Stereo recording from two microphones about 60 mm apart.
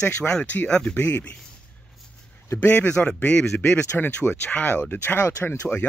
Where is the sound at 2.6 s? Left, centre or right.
Left.